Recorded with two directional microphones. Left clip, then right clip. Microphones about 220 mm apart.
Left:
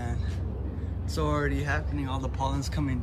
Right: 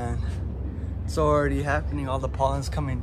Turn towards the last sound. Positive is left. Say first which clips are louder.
# right 1 dB
turn(degrees=0)  # may be behind; listen again after turning